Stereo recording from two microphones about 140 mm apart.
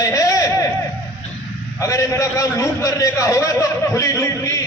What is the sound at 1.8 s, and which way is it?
A man's voice, 25° left (ahead or behind).